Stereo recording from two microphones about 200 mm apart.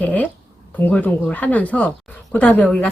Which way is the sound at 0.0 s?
10° left (ahead or behind).